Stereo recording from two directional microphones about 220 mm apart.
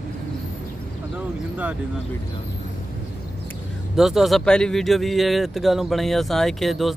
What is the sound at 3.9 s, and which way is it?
Speech, centre (ahead or behind).